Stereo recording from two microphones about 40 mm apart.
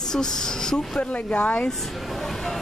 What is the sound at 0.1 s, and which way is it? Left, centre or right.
Speech, centre.